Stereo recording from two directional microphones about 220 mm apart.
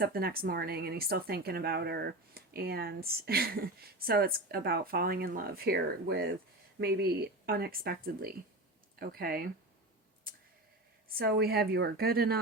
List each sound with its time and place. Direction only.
0.0 s speech: 45° right (ahead or behind)
11.2 s speech: 45° right (ahead or behind)